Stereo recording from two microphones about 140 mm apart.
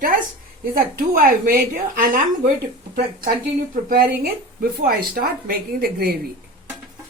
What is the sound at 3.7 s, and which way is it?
A woman's voice, 90° right.